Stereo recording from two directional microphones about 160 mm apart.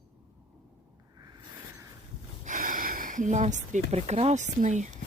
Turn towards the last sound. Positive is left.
turn(degrees=-50)  # may be behind; listen again after turning